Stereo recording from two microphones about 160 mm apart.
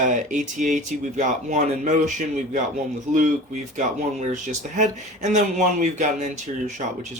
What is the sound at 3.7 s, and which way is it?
Speech, 50° right (ahead or behind).